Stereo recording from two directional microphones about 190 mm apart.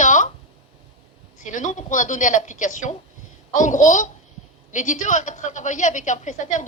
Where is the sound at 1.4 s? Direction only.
40° left (ahead or behind).